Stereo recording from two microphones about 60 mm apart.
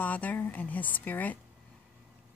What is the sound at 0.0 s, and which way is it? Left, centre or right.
A woman's voice, left.